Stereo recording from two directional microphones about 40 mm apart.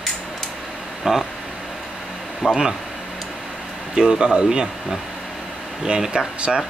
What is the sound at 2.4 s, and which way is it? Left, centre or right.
Speech, centre.